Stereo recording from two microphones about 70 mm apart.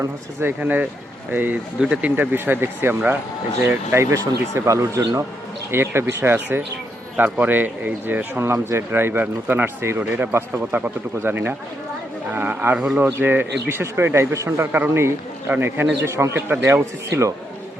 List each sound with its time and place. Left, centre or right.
0.4 s speech: right
1.8 s speech: centre; by 5.0 s right
5.7 s speech: right
10.0 s speech: right
12.7 s speech: centre
13.1 s speech: right
16.0 s a man's voice: right